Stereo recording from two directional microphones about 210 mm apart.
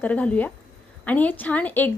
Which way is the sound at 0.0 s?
5° left (ahead or behind).